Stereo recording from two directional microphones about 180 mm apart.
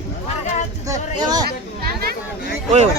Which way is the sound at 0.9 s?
20° right (ahead or behind).